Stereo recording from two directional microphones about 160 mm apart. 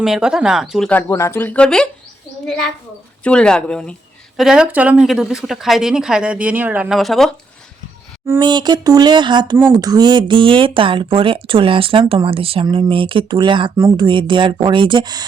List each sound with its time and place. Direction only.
0.0 s a woman's voice: 5° right (ahead or behind)
0.9 s speech: 15° left (ahead or behind)
3.2 s a woman's voice: 5° left (ahead or behind)
8.4 s a sound: 25° right (ahead or behind)
9.7 s speech: 25° right (ahead or behind)
13.7 s a sound: 20° right (ahead or behind)
14.0 s speech: 30° right (ahead or behind)